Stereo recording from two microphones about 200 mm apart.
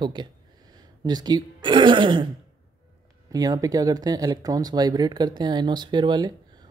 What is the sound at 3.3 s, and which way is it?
Speech, 20° right (ahead or behind).